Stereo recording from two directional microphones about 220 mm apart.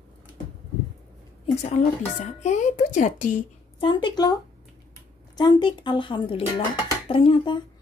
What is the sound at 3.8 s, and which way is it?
A woman's voice, 20° left (ahead or behind).